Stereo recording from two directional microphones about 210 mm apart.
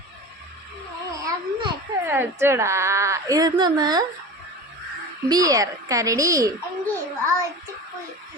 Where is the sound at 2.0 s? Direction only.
10° right (ahead or behind).